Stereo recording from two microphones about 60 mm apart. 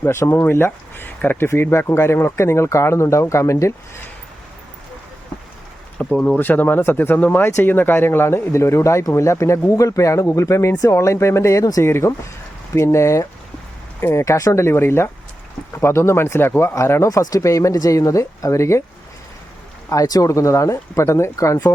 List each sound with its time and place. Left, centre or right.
0.0 s speech: left
1.5 s speech: left
6.1 s speech: centre
6.4 s speech: left
14.6 s speech: left
16.7 s speech: left
17.1 s speech: left
19.9 s speech: left